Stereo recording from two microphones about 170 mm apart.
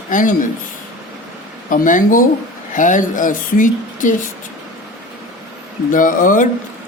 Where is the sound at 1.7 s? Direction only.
50° left (ahead or behind).